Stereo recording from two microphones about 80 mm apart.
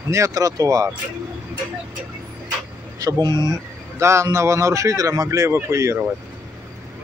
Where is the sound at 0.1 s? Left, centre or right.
Right.